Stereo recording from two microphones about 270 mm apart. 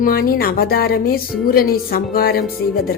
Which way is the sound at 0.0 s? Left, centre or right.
Left.